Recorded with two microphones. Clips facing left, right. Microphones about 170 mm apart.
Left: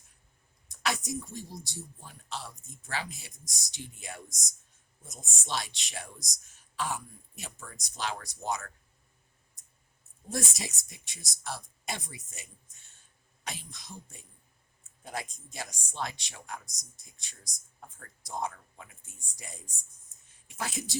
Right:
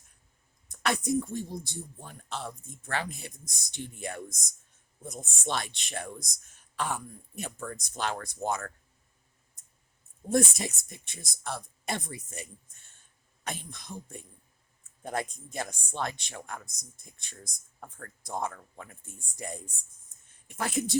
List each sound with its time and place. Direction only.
0.7 s speech: 55° right (ahead or behind)
10.2 s speech: 55° right (ahead or behind)